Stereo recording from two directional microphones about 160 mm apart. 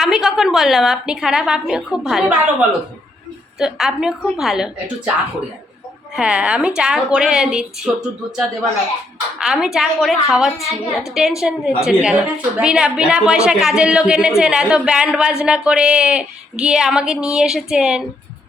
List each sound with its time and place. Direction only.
0.0 s a woman's voice: 5° right (ahead or behind)
6.1 s a woman's voice: 5° right (ahead or behind)
9.4 s a woman's voice: 5° right (ahead or behind)